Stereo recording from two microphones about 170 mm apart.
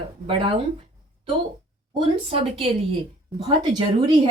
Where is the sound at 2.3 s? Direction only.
35° right (ahead or behind).